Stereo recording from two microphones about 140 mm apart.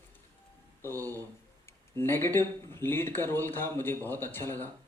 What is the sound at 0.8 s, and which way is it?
Speech, 15° left (ahead or behind).